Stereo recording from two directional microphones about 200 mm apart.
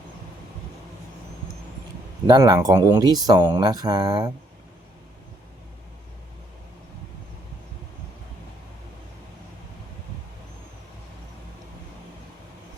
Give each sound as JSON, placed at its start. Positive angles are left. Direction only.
{"t": 2.2, "sound": "speech", "side_deg": -20}